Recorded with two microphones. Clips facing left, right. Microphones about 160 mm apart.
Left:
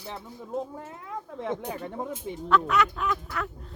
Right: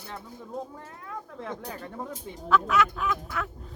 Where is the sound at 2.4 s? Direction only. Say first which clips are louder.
Even; centre (ahead or behind).